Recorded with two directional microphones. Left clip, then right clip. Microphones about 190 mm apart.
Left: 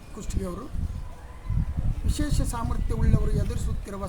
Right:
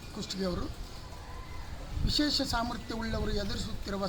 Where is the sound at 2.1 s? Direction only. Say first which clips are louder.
Right 4 dB; 20° left (ahead or behind).